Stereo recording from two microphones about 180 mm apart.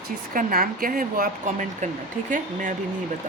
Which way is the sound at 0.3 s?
50° right (ahead or behind).